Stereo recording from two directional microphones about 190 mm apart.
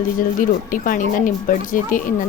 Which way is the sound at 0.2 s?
45° left (ahead or behind).